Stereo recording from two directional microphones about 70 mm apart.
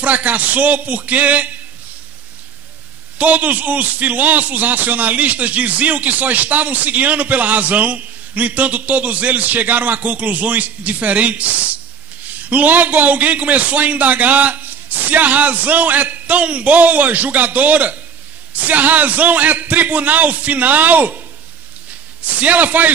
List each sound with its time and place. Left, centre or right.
0.0 s a man's voice: right
3.2 s a man's voice: right
22.2 s a man's voice: right